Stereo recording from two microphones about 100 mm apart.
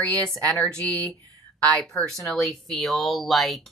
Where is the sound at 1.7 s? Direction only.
5° left (ahead or behind).